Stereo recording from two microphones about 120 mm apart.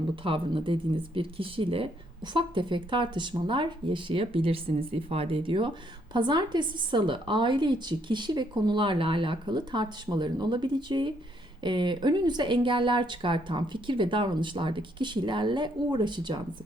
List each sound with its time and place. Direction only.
0.2 s a woman's voice: 45° right (ahead or behind)